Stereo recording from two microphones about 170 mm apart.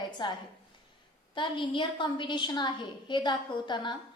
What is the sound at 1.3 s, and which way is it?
A woman's voice, 30° left (ahead or behind).